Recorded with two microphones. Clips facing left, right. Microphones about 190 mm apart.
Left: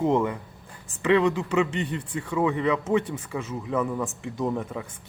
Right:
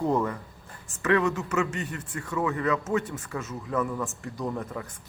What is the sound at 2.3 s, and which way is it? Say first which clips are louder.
A man's voice: left 3 dB; 15° left (ahead or behind).